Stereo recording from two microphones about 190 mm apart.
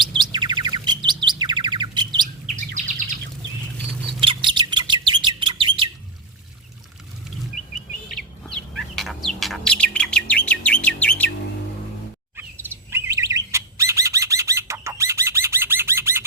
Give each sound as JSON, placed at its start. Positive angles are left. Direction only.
{"t": 0.3, "sound": "bird", "side_deg": -25}
{"t": 2.2, "sound": "chirp", "side_deg": -40}
{"t": 4.2, "sound": "bird", "side_deg": -25}
{"t": 8.1, "sound": "bird", "side_deg": 5}
{"t": 12.4, "sound": "bird", "side_deg": -10}